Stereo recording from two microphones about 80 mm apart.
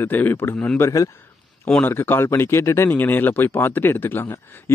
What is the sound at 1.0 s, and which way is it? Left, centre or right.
Speech, left.